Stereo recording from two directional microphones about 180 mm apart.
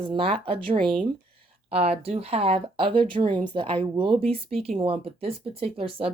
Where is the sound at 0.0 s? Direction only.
30° right (ahead or behind).